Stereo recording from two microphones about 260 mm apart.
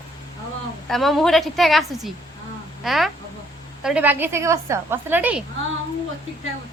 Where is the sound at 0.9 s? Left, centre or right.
Centre.